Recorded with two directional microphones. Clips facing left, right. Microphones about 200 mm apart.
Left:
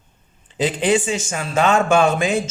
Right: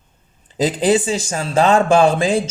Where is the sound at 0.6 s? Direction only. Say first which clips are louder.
Right 2 dB; 35° right (ahead or behind).